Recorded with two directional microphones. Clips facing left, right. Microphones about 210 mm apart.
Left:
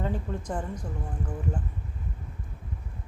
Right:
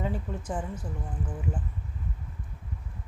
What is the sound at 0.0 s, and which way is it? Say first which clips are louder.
Speech: left 1 dB; 5° right (ahead or behind).